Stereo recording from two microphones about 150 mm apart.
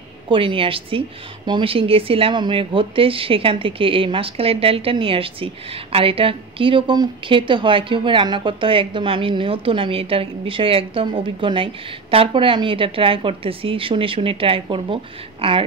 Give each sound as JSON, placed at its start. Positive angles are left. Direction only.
{"t": 0.3, "sound": "speech", "side_deg": -35}